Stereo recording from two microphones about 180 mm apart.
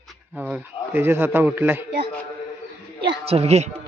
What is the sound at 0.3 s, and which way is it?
Music, 10° right (ahead or behind).